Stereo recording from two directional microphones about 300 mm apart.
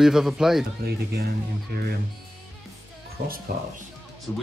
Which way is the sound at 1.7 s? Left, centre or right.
Right.